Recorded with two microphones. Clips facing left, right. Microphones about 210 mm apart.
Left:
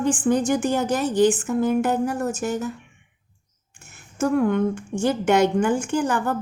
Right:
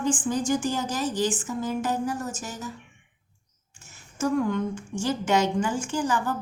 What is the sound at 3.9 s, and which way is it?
A woman's voice, 60° left (ahead or behind).